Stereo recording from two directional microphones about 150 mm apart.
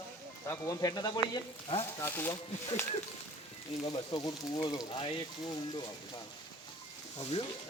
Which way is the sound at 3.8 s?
30° left (ahead or behind).